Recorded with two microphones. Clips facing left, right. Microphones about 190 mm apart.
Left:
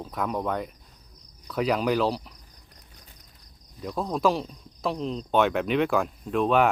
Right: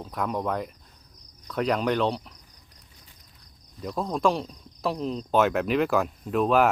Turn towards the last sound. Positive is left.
turn(degrees=0)  # may be behind; listen again after turning